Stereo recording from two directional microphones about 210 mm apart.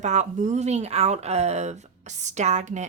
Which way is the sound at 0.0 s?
35° right (ahead or behind).